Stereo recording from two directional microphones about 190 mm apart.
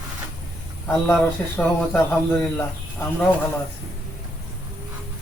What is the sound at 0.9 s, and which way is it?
Speech, 15° left (ahead or behind).